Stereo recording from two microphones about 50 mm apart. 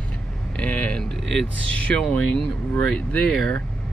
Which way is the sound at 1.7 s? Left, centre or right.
Left.